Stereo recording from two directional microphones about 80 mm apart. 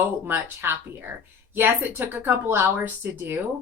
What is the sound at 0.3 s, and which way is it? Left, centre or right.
Speech, right.